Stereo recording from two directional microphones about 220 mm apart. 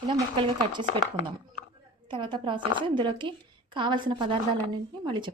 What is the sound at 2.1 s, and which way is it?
Speech, 20° right (ahead or behind).